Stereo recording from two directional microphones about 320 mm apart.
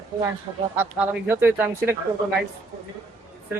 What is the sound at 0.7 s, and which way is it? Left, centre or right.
Speech, centre.